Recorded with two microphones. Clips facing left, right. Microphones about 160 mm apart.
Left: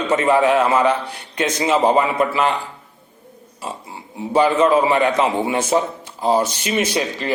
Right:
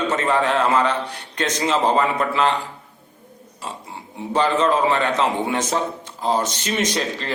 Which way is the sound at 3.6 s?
10° left (ahead or behind).